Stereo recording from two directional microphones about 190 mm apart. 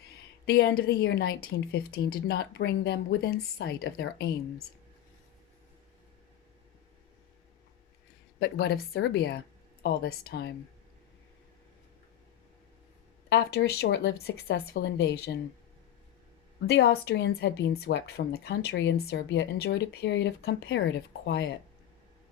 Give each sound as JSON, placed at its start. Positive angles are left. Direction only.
{"t": 0.4, "sound": "speech", "side_deg": 60}
{"t": 8.4, "sound": "speech", "side_deg": 55}
{"t": 13.3, "sound": "speech", "side_deg": 55}
{"t": 16.6, "sound": "speech", "side_deg": 60}